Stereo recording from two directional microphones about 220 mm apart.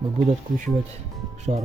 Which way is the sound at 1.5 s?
30° right (ahead or behind).